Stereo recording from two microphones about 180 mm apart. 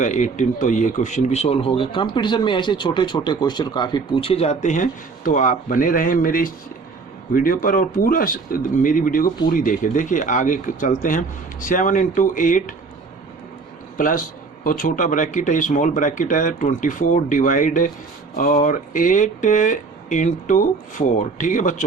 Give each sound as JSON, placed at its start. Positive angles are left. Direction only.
{"t": 0.0, "sound": "speech", "side_deg": 45}
{"t": 14.0, "sound": "speech", "side_deg": 50}